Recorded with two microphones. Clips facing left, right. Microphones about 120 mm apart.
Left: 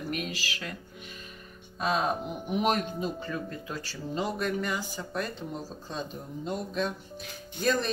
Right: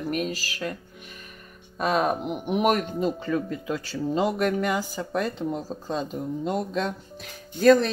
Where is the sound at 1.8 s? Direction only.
60° right (ahead or behind).